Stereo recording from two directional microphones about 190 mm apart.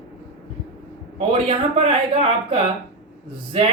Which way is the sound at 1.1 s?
30° right (ahead or behind).